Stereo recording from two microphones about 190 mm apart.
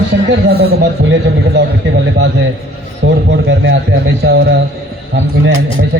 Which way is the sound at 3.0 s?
70° right (ahead or behind).